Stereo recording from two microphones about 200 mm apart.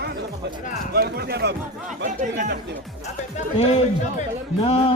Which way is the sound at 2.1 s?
35° right (ahead or behind).